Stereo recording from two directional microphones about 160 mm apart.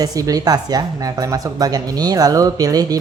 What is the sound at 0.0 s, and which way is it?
Speech, 25° right (ahead or behind).